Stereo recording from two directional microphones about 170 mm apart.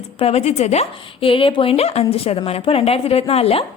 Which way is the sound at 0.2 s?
35° left (ahead or behind).